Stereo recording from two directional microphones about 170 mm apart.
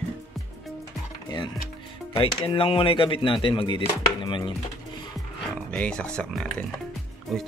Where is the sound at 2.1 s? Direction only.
30° left (ahead or behind).